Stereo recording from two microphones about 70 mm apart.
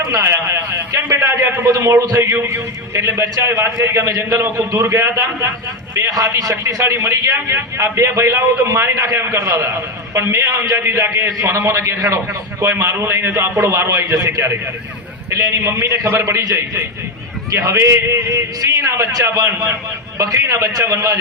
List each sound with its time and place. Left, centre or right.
0.1 s a sound: right
1.0 s a sound: right
1.3 s a man's voice: right
2.3 s a man's voice: right
15.3 s a man's voice: right
16.2 s a man's voice: right